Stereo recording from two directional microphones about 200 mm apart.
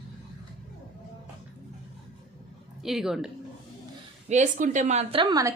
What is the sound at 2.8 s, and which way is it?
Speech, centre (ahead or behind).